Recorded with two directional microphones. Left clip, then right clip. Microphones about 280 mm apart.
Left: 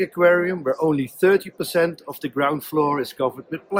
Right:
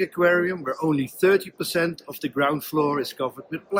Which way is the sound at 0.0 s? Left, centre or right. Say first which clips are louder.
Left 3 dB; left.